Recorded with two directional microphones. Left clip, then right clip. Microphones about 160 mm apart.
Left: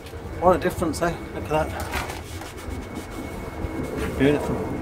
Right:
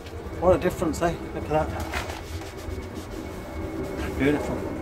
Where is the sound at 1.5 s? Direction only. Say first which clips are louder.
Left 1 dB; 20° left (ahead or behind).